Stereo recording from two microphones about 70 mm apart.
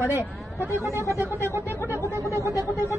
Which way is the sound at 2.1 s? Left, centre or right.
Right.